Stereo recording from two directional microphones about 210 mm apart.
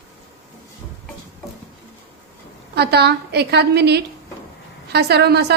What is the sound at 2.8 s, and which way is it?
A woman's voice, 50° right (ahead or behind).